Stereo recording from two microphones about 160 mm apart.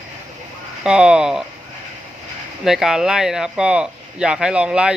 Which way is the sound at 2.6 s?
Centre (ahead or behind).